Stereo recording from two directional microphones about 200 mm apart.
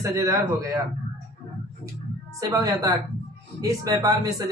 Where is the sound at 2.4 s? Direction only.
15° right (ahead or behind).